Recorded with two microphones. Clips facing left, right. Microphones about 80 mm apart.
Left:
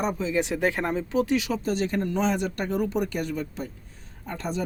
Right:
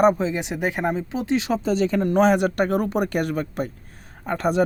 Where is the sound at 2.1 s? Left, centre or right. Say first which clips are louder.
Right 8 dB; right.